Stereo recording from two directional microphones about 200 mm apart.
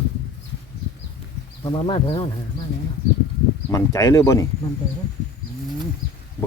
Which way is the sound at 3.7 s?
15° left (ahead or behind).